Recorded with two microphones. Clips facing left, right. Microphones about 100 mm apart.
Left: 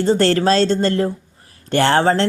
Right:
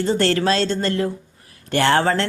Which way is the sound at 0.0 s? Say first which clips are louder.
Left 4 dB; 35° left (ahead or behind).